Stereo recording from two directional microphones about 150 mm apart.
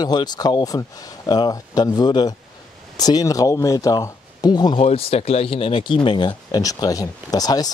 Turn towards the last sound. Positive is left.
turn(degrees=25)  # may be behind; listen again after turning